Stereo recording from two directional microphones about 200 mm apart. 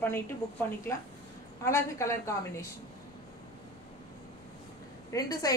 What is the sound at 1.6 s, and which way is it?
A woman's voice, 15° left (ahead or behind).